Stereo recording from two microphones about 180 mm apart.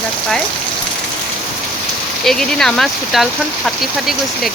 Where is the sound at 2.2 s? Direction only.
5° left (ahead or behind).